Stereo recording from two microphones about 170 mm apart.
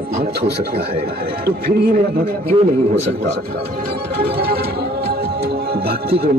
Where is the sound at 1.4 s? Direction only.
70° right (ahead or behind).